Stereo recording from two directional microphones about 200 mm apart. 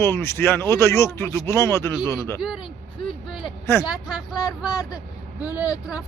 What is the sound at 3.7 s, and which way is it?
Speech, 15° left (ahead or behind).